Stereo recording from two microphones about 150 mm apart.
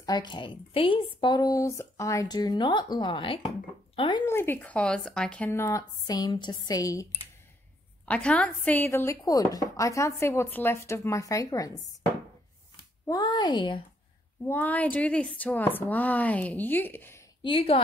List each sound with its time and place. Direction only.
0.0 s speech: 30° left (ahead or behind)
4.3 s a woman's voice: 15° left (ahead or behind)
8.0 s speech: 10° left (ahead or behind)
13.0 s speech: 25° left (ahead or behind)
14.4 s a woman's voice: 10° left (ahead or behind)
17.4 s a woman's voice: 35° left (ahead or behind)